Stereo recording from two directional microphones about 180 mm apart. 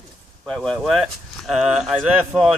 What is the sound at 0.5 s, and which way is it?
Speech, centre (ahead or behind).